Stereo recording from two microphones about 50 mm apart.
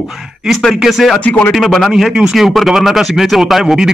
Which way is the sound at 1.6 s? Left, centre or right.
Centre.